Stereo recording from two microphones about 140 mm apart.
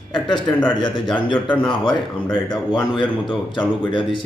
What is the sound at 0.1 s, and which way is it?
A man's voice, 35° left (ahead or behind).